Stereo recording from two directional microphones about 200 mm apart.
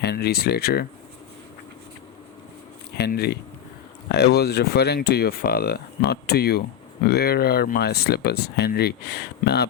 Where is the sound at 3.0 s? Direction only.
55° left (ahead or behind).